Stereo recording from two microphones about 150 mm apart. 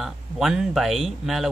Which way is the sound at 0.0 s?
Centre (ahead or behind).